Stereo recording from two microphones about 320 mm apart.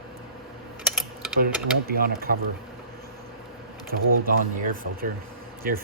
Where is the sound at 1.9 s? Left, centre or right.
Right.